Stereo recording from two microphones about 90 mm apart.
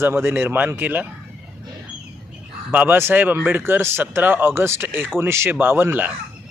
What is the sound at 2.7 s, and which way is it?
Speech, 20° right (ahead or behind).